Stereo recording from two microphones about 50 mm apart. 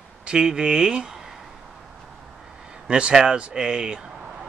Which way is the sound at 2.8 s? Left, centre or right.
Right.